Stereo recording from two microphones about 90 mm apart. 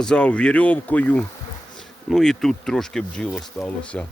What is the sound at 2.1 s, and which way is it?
A man's voice, 5° left (ahead or behind).